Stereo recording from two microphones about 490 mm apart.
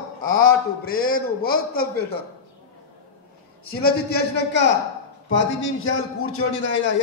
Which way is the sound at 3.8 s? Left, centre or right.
Centre.